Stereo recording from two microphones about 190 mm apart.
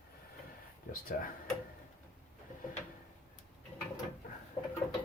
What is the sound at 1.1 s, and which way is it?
Speech, 45° left (ahead or behind).